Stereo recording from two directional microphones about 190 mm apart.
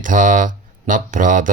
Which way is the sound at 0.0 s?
45° right (ahead or behind).